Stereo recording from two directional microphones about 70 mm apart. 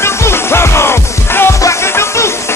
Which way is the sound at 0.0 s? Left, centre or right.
Left.